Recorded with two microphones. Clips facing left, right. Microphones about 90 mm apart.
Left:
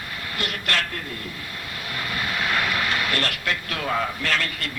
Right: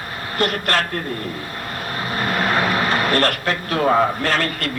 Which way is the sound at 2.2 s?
45° right (ahead or behind).